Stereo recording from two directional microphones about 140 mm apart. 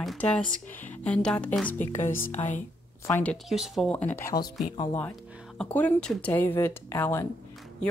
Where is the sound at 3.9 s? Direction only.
10° left (ahead or behind).